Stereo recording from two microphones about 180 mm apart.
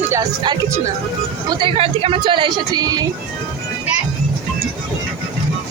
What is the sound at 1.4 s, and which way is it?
Speech, 30° right (ahead or behind).